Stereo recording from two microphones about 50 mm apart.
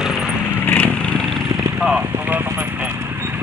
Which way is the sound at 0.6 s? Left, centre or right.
Left.